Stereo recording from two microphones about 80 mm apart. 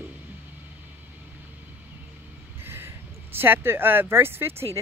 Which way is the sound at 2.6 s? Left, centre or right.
Right.